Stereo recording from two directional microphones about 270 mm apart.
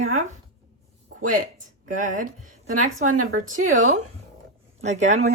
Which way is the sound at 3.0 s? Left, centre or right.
Right.